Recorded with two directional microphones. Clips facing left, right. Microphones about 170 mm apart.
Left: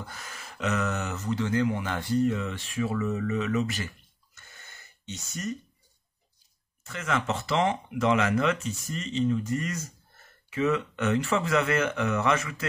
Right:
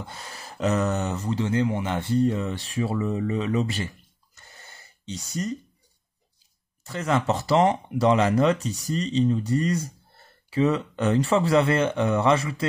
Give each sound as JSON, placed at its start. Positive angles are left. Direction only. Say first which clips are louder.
{"t": 0.0, "sound": "speech", "louder": "right 3 dB", "side_deg": -30}
{"t": 4.4, "sound": "gasp", "louder": "right 3 dB", "side_deg": -35}
{"t": 5.3, "sound": "speech", "louder": "right 4 dB", "side_deg": -35}
{"t": 6.8, "sound": "speech", "louder": "right 5 dB", "side_deg": -35}